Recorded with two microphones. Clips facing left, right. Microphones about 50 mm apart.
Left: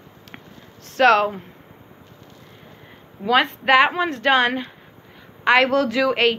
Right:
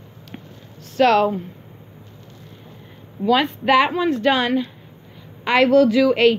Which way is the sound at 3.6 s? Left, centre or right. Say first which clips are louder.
Right 1 dB; left.